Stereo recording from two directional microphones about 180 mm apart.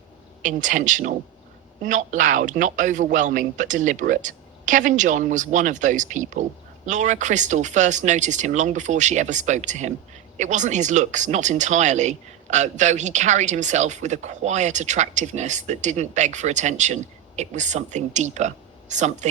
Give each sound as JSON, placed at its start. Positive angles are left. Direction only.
{"t": 0.4, "sound": "a man's voice", "side_deg": -45}